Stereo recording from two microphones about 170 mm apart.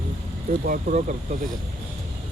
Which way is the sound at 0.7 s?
50° right (ahead or behind).